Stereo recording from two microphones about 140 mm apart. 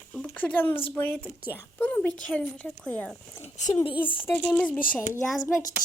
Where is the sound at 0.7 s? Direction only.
40° left (ahead or behind).